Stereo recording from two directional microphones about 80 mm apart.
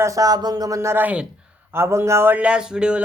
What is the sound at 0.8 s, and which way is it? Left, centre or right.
Speech, right.